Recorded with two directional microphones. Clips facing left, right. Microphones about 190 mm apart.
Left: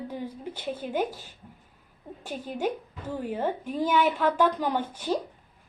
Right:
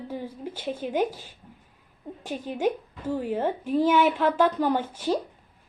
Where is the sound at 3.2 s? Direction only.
10° right (ahead or behind).